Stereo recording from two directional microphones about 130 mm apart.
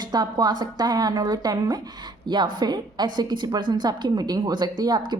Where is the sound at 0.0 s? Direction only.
30° right (ahead or behind).